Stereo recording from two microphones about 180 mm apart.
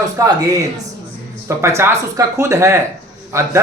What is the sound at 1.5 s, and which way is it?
A man's voice, 15° right (ahead or behind).